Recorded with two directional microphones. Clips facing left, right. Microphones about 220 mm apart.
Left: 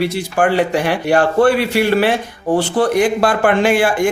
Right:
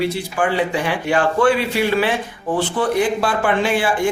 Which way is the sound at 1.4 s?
60° left (ahead or behind).